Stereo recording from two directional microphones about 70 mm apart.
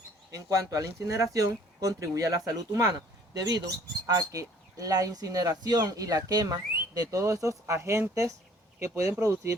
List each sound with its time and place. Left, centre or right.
0.3 s speech: right